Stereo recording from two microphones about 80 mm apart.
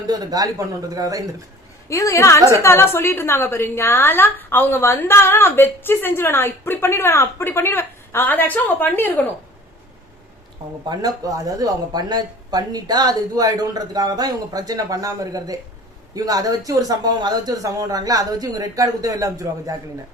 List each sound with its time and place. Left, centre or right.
0.1 s speech: right
1.9 s a woman's voice: left
10.8 s speech: right